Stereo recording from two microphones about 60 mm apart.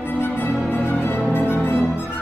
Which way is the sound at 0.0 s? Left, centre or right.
Left.